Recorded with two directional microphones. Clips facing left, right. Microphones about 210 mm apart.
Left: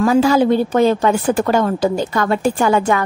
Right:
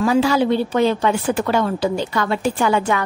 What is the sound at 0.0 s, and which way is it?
A woman's voice, 45° left (ahead or behind).